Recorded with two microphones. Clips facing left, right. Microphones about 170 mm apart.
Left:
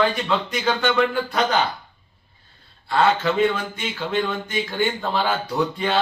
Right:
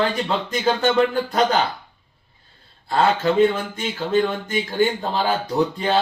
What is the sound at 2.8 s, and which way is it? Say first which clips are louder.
Speech: right 1 dB; 40° right (ahead or behind).